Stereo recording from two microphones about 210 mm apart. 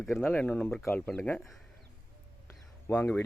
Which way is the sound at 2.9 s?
10° left (ahead or behind).